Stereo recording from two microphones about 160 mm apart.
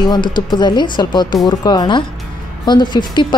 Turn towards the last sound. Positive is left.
turn(degrees=30)  # may be behind; listen again after turning